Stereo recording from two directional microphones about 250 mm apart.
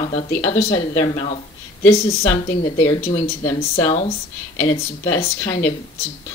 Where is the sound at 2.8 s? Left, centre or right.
Left.